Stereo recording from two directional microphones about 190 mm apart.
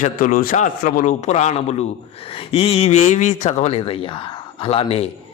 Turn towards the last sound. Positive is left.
turn(degrees=30)  # may be behind; listen again after turning